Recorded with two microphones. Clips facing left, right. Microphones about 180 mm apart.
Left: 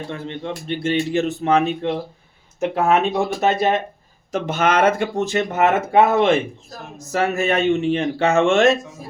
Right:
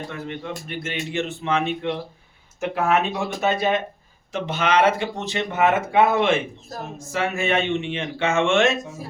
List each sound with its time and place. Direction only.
0.1 s speech: 30° left (ahead or behind)
4.3 s speech: 45° left (ahead or behind)